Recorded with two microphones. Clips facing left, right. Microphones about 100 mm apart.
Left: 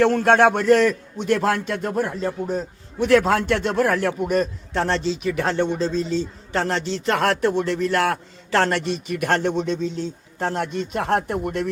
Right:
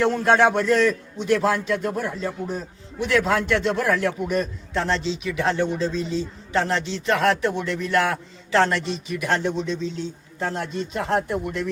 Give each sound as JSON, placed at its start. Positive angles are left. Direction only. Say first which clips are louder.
{"t": 0.0, "sound": "a man's voice", "louder": "left 2 dB", "side_deg": 60}
{"t": 5.8, "sound": "a man's voice", "louder": "left 2 dB", "side_deg": 35}
{"t": 8.5, "sound": "speech", "louder": "even", "side_deg": 55}